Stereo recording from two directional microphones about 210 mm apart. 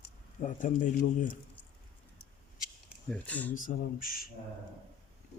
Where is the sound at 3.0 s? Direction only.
5° left (ahead or behind).